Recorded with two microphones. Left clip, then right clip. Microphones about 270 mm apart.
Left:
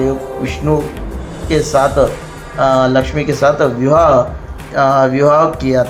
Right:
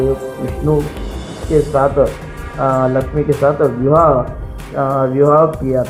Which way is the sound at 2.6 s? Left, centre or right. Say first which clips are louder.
Left 3 dB; left.